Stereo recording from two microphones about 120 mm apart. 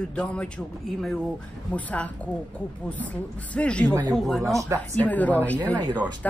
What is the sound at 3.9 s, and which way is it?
Speech, 30° right (ahead or behind).